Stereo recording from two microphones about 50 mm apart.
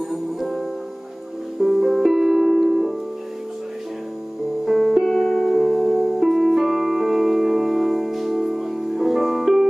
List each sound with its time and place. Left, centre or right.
0.1 s music: centre
4.6 s music: centre
5.0 s music: centre